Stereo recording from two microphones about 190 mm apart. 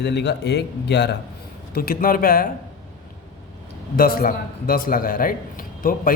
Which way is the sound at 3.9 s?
50° left (ahead or behind).